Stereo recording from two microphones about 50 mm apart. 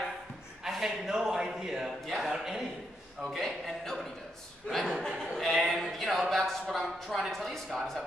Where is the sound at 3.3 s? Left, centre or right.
Centre.